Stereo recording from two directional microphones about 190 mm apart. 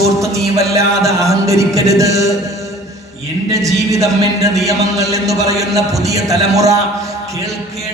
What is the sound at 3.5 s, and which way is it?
A woman's voice, 15° right (ahead or behind).